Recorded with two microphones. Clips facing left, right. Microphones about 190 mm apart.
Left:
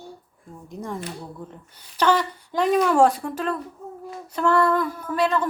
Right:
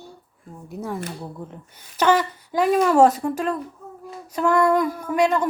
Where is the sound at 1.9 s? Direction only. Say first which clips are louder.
Right 2 dB; 10° right (ahead or behind).